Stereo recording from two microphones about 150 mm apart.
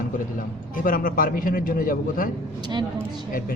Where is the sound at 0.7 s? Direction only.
65° left (ahead or behind).